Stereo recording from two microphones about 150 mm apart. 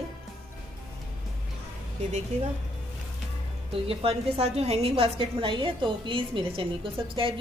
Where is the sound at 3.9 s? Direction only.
40° right (ahead or behind).